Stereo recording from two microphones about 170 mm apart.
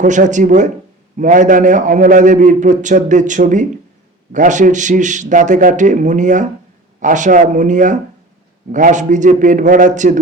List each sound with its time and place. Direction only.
0.0 s a man's voice: 45° right (ahead or behind)